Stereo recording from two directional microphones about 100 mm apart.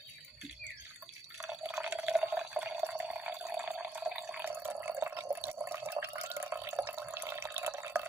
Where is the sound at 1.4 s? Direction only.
5° right (ahead or behind).